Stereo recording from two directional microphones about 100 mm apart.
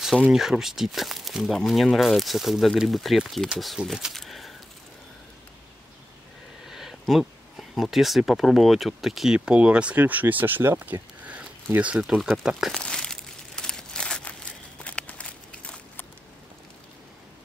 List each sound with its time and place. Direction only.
0.3 s speech: 5° right (ahead or behind)
6.6 s speech: 5° right (ahead or behind)
12.0 s speech: centre (ahead or behind)
12.7 s crumpling: 5° left (ahead or behind)
14.8 s a sound: 10° left (ahead or behind)